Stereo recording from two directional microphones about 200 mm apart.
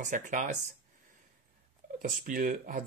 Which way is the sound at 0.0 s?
40° right (ahead or behind).